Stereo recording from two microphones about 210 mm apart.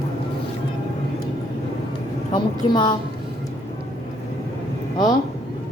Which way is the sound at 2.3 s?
20° left (ahead or behind).